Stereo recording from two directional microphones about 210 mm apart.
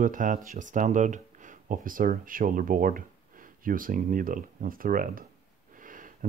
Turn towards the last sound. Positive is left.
turn(degrees=-40)  # may be behind; listen again after turning